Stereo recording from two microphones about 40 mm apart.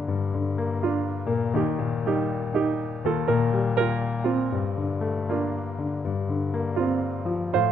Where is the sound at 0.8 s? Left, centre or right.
Centre.